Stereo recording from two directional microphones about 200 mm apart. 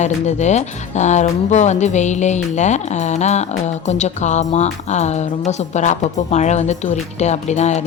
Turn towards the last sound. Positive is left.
turn(degrees=35)  # may be behind; listen again after turning